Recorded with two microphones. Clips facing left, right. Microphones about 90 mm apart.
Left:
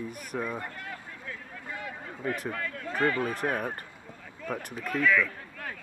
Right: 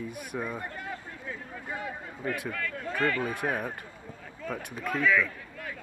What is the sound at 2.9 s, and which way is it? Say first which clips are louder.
Speech: left 1 dB; 15° left (ahead or behind).